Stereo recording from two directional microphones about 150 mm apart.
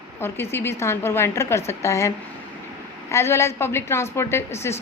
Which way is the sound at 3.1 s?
20° left (ahead or behind).